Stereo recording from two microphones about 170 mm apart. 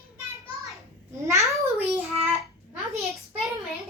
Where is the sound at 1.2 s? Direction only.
20° right (ahead or behind).